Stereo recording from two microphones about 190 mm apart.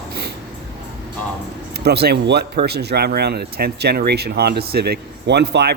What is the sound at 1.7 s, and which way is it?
A man's voice, 60° right (ahead or behind).